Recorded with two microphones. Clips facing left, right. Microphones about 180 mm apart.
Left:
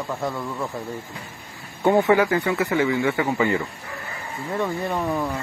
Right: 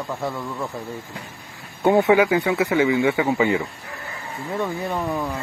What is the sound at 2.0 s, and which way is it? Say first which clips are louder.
Speech: right 3 dB; 15° right (ahead or behind).